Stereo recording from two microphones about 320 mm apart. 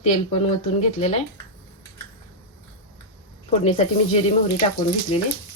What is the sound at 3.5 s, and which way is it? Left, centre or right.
Speech, centre.